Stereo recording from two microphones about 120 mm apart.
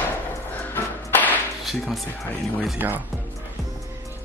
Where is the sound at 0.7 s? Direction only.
15° left (ahead or behind).